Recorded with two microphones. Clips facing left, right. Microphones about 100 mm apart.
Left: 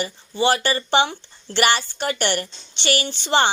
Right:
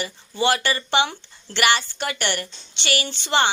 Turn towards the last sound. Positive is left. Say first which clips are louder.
# left 2 dB
turn(degrees=35)  # may be behind; listen again after turning